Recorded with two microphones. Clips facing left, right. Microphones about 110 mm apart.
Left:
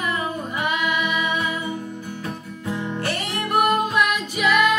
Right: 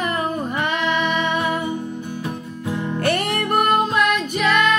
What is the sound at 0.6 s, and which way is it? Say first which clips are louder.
Female singing: right 1 dB; 10° left (ahead or behind).